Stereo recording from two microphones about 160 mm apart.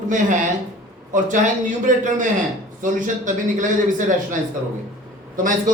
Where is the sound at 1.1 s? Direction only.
55° right (ahead or behind).